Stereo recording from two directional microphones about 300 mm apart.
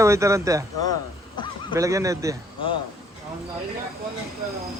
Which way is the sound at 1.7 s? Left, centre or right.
Centre.